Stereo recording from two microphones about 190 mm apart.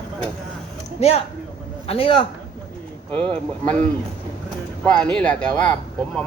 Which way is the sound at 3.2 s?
5° left (ahead or behind).